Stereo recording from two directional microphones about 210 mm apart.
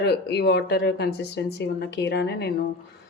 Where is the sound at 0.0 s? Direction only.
50° left (ahead or behind).